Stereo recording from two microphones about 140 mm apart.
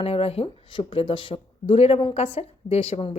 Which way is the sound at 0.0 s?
45° left (ahead or behind).